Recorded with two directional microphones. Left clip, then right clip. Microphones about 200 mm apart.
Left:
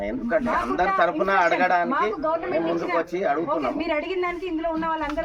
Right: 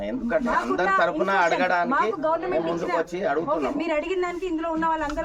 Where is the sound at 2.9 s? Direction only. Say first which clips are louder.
Even; 15° right (ahead or behind).